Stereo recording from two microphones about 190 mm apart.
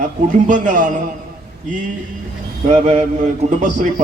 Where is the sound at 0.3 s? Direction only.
40° right (ahead or behind).